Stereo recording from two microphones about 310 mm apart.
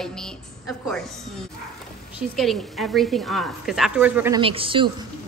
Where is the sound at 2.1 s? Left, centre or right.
Centre.